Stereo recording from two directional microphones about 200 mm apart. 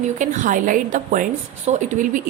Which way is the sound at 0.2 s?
40° right (ahead or behind).